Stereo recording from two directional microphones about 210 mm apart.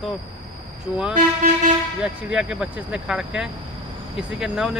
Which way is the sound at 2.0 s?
5° right (ahead or behind).